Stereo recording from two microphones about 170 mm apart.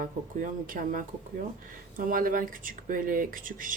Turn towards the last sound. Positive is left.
turn(degrees=-55)  # may be behind; listen again after turning